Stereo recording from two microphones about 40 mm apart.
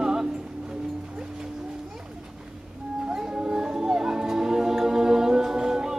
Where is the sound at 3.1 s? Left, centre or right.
Centre.